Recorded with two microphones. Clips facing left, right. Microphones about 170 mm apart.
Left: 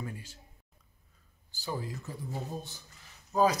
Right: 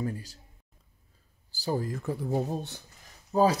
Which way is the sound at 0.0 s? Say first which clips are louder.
Right 8 dB; 35° right (ahead or behind).